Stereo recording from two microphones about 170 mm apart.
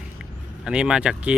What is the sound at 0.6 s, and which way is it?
Speech, 5° right (ahead or behind).